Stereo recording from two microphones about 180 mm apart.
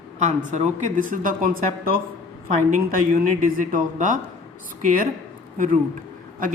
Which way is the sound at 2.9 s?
50° right (ahead or behind).